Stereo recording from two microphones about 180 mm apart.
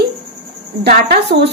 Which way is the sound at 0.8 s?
60° right (ahead or behind).